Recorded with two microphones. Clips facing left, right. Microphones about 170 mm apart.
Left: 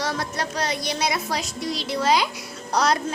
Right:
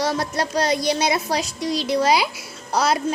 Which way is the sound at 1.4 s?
15° right (ahead or behind).